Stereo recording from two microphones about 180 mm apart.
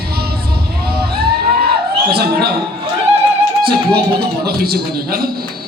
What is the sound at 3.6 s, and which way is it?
Music, 60° right (ahead or behind).